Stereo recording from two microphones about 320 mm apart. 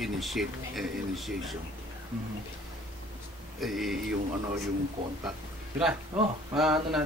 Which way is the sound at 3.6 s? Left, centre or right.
Centre.